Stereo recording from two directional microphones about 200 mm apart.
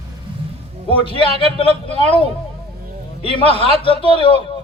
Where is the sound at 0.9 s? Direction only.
30° right (ahead or behind).